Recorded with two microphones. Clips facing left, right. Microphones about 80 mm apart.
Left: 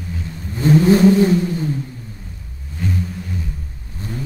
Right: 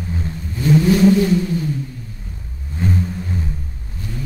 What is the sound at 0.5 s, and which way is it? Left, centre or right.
Vehicle, left.